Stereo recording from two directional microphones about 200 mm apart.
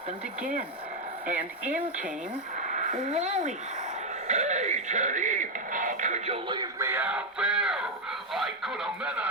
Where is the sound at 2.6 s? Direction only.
40° right (ahead or behind).